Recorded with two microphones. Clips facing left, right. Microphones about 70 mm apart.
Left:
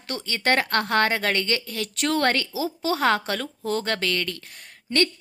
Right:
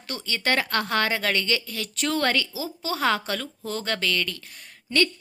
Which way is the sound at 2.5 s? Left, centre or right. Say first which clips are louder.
Left 5 dB; left.